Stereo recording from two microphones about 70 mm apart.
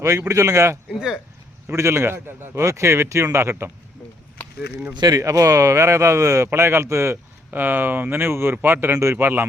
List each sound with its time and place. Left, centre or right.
0.3 s speech: right
0.9 s speech: centre
1.6 s a man's voice: right
4.9 s speech: right
5.2 s speech: right
6.5 s a man's voice: right